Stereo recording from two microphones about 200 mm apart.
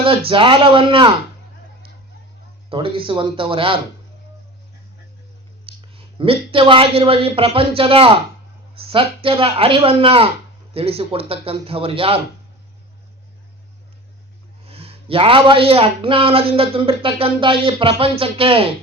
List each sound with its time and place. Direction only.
0.3 s speech: 25° right (ahead or behind)
2.6 s speech: 25° right (ahead or behind)
5.6 s a woman's voice: 25° right (ahead or behind)
14.7 s speech: 30° right (ahead or behind)